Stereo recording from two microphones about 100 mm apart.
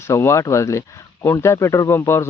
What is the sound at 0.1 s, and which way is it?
Speech, 25° left (ahead or behind).